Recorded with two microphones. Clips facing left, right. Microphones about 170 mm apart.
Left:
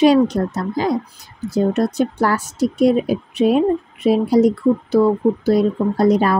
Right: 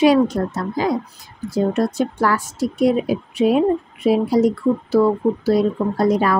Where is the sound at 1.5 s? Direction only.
20° left (ahead or behind).